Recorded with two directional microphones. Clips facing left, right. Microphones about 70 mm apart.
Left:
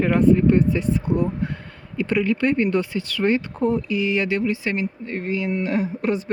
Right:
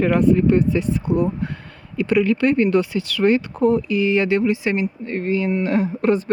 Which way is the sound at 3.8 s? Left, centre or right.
Right.